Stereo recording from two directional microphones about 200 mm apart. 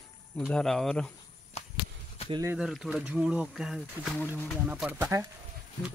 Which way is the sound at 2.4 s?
5° right (ahead or behind).